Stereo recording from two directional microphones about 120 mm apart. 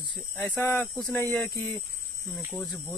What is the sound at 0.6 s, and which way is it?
Speech, 20° left (ahead or behind).